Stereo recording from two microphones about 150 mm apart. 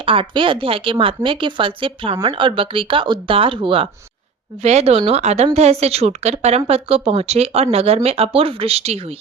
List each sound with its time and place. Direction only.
0.0 s a woman's voice: 35° right (ahead or behind)
4.6 s speech: 45° right (ahead or behind)